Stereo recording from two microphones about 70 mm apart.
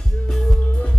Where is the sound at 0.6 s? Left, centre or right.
Centre.